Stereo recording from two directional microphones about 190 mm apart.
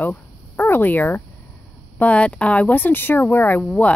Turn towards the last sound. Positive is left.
turn(degrees=5)  # may be behind; listen again after turning